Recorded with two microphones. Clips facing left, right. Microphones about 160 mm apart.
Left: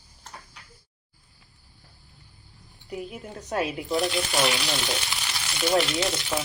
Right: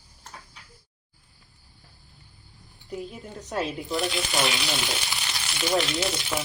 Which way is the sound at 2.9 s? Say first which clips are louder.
Even; 5° left (ahead or behind).